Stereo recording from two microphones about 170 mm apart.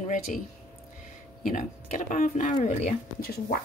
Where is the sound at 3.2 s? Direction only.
60° left (ahead or behind).